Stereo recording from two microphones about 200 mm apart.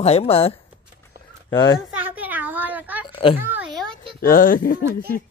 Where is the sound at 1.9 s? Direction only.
10° right (ahead or behind).